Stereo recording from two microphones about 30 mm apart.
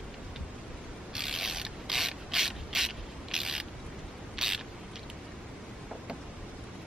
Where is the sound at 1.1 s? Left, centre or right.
Centre.